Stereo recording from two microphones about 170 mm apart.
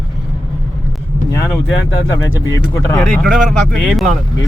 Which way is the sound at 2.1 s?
20° left (ahead or behind).